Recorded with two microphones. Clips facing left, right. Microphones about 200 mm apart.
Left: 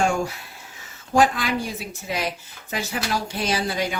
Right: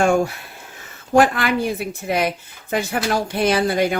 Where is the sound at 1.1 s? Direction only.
60° right (ahead or behind).